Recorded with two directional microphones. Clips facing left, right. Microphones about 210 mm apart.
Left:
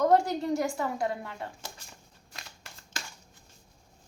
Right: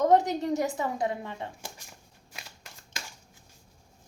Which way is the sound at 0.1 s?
20° right (ahead or behind).